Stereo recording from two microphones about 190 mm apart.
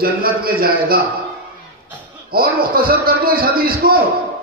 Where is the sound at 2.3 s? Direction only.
50° right (ahead or behind).